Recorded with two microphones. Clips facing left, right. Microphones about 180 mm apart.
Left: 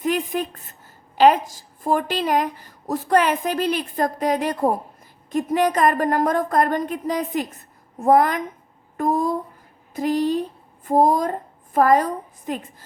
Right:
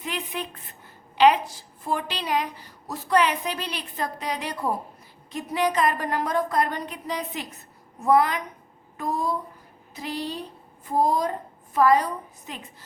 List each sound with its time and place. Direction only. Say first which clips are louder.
0.0 s a woman's voice: left 9 dB; 45° left (ahead or behind)